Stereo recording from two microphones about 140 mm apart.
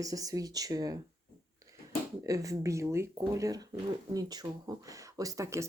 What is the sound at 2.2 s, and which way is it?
Speech, 25° right (ahead or behind).